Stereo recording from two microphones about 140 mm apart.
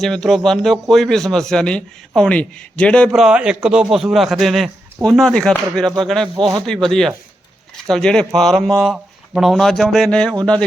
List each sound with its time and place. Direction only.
0.0 s a man's voice: centre (ahead or behind)
3.2 s a man's voice: 5° right (ahead or behind)
6.3 s speech: 30° right (ahead or behind)
6.8 s a man's voice: 5° left (ahead or behind)